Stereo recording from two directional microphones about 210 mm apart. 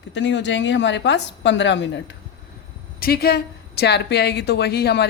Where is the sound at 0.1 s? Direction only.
55° left (ahead or behind).